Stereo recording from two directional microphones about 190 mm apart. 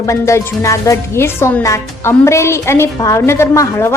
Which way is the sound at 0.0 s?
15° left (ahead or behind).